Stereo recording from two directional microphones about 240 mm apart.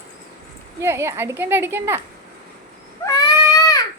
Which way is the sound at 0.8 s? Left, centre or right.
Centre.